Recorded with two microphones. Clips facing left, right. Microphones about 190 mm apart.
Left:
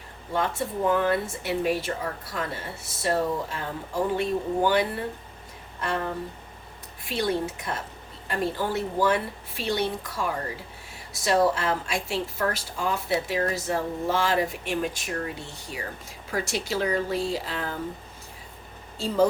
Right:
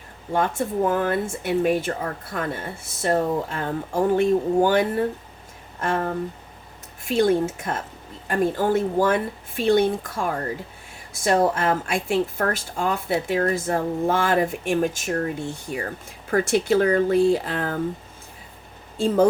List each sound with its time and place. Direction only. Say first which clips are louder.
0.3 s a woman's voice: right 5 dB; 50° right (ahead or behind)
18.9 s a woman's voice: right 4 dB; 50° right (ahead or behind)